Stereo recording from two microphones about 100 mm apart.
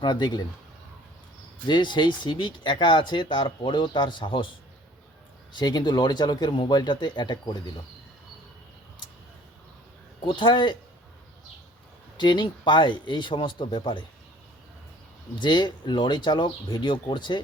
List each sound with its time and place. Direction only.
0.0 s speech: 45° left (ahead or behind)
1.6 s speech: 50° left (ahead or behind)
5.5 s speech: 45° left (ahead or behind)
10.2 s speech: 50° left (ahead or behind)
12.1 s speech: 50° left (ahead or behind)
15.4 s speech: 50° left (ahead or behind)